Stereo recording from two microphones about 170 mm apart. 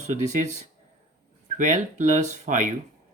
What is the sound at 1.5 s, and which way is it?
Speech, 45° right (ahead or behind).